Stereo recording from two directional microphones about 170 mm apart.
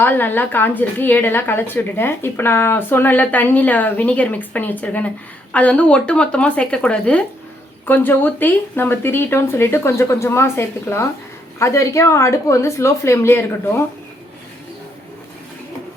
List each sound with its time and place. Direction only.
0.0 s a woman's voice: 10° left (ahead or behind)